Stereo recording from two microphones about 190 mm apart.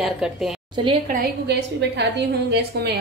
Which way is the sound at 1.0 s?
60° right (ahead or behind).